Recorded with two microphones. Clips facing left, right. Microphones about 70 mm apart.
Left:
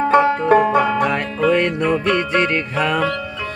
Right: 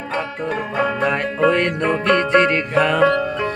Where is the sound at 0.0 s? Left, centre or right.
Left.